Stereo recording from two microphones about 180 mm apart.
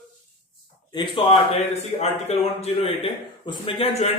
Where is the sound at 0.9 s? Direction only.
25° left (ahead or behind).